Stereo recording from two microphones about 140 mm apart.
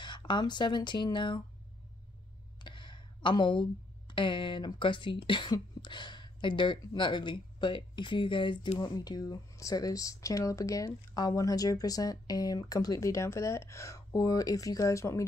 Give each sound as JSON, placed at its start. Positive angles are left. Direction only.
{"t": 0.0, "sound": "speech", "side_deg": 35}
{"t": 2.6, "sound": "a sound", "side_deg": 35}
{"t": 4.1, "sound": "speech", "side_deg": 35}